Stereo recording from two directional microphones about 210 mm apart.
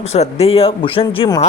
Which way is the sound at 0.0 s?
30° left (ahead or behind).